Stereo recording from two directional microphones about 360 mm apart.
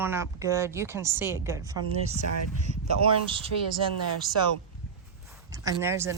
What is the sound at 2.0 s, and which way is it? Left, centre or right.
Speech, right.